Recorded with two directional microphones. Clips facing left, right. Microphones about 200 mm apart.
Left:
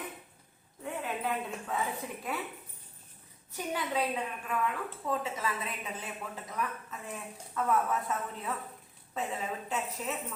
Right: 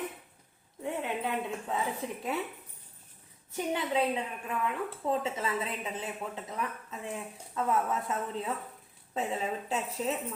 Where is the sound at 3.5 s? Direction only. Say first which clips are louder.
Right 3 dB; 25° right (ahead or behind).